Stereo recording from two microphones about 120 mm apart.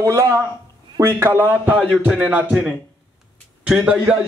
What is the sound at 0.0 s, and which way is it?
A man's voice, 25° right (ahead or behind).